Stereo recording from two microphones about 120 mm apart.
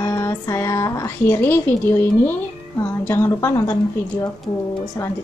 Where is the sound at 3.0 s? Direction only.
20° left (ahead or behind).